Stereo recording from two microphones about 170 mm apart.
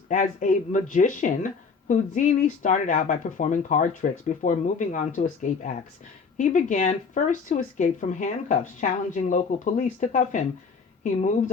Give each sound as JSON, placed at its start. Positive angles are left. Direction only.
{"t": 0.1, "sound": "speech", "side_deg": 50}